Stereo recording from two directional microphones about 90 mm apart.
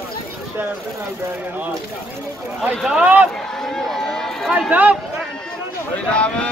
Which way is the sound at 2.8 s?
10° right (ahead or behind).